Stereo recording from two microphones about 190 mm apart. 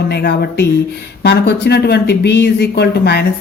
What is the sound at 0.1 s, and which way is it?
Speech, 60° left (ahead or behind).